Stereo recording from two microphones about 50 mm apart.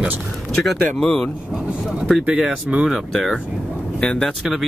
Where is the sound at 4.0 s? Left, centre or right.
Centre.